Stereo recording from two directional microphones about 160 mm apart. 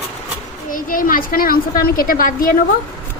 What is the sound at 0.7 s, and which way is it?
A woman's voice, 60° left (ahead or behind).